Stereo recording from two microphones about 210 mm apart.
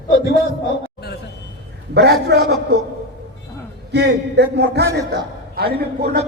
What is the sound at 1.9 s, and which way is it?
Speech, 50° right (ahead or behind).